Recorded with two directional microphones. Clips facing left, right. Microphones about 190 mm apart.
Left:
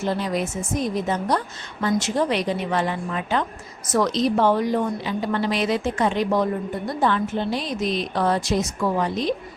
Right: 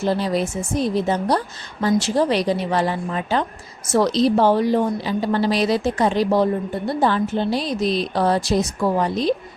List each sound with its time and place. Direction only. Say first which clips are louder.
0.0 s a woman's voice: right 3 dB; 35° right (ahead or behind)